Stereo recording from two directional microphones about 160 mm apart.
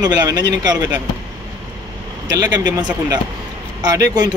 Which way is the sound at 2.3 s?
25° right (ahead or behind).